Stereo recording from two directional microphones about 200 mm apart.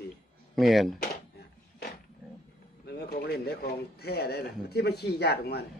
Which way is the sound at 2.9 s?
50° left (ahead or behind).